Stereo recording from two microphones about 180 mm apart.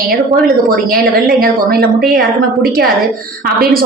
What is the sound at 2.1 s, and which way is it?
A woman's voice, 55° right (ahead or behind).